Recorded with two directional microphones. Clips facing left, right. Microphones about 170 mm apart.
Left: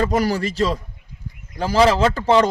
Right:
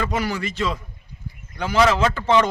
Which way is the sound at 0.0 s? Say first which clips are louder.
Left 5 dB; 40° left (ahead or behind).